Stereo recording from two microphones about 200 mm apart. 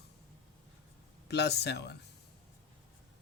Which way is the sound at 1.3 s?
55° left (ahead or behind).